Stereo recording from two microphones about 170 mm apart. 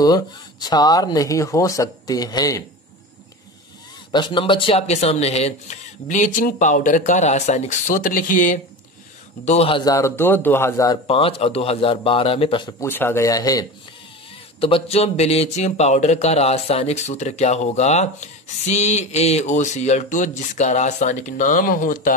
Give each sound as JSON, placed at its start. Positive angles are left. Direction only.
{"t": 0.0, "sound": "speech", "side_deg": 25}
{"t": 4.1, "sound": "speech", "side_deg": 25}
{"t": 9.4, "sound": "speech", "side_deg": 40}
{"t": 11.1, "sound": "speech", "side_deg": 35}
{"t": 12.8, "sound": "speech", "side_deg": 15}
{"t": 14.6, "sound": "speech", "side_deg": 35}